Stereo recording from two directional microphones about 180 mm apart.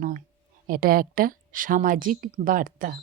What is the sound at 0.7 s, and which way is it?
A woman's voice, 55° right (ahead or behind).